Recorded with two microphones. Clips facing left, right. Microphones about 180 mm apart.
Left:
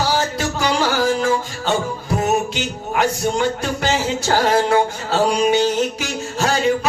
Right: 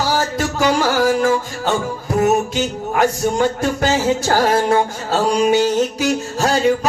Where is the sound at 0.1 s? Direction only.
45° right (ahead or behind).